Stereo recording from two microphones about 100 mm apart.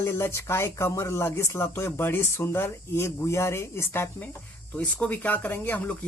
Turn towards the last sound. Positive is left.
turn(degrees=15)  # may be behind; listen again after turning